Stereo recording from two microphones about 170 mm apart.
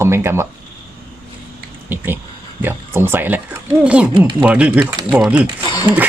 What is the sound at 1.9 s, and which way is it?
Speech, 10° right (ahead or behind).